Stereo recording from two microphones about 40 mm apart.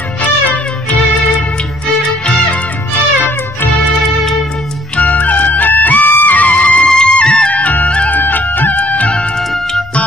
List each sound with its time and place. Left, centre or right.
0.2 s music: left
2.0 s music: left
2.9 s music: left
4.9 s music: left
6.9 s music: left
8.1 s music: left